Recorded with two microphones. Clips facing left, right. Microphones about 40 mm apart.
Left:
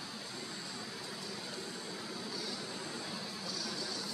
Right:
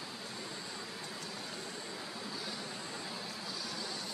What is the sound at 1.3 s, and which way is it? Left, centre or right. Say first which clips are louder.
Vehicle: even; centre.